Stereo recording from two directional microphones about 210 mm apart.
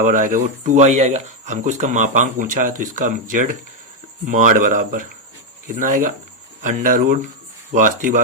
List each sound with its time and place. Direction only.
0.0 s speech: 40° right (ahead or behind)